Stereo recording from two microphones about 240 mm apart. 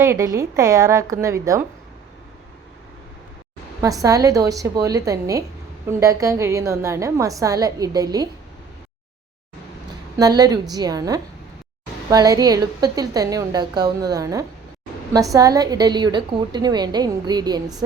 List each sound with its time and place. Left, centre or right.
0.0 s a woman's voice: centre
4.0 s a woman's voice: centre
10.2 s a woman's voice: centre